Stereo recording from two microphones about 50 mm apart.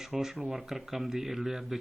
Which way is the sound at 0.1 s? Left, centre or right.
Centre.